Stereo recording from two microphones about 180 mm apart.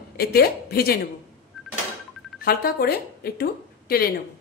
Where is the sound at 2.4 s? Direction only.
55° left (ahead or behind).